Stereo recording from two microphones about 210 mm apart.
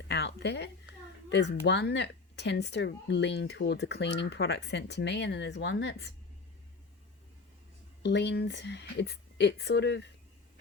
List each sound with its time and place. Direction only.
0.1 s a woman's voice: 55° left (ahead or behind)
8.0 s speech: 55° left (ahead or behind)